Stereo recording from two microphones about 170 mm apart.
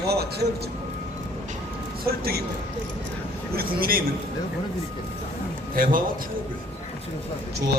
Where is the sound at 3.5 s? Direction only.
60° right (ahead or behind).